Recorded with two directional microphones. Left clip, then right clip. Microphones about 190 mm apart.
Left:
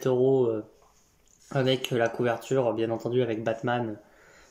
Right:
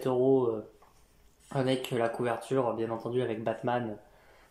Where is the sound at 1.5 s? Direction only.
10° left (ahead or behind).